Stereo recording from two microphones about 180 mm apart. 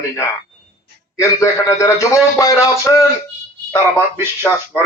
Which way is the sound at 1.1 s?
15° left (ahead or behind).